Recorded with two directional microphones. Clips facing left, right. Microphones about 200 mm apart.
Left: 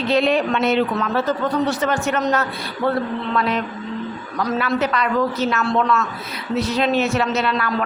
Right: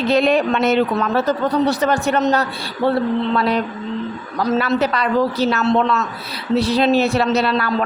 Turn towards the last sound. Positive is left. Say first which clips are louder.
# right 3 dB
turn(degrees=-35)  # may be behind; listen again after turning